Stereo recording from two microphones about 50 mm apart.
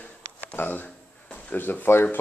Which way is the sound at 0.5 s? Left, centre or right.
Left.